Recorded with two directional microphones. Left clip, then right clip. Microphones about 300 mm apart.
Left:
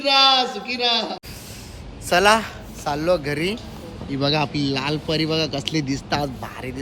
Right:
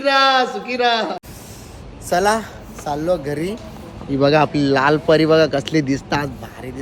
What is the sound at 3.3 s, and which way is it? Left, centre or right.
Speech, left.